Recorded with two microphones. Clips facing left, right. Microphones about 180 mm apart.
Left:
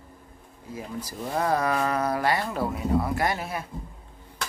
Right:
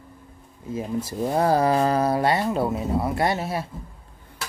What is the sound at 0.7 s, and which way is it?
Speech, 25° right (ahead or behind).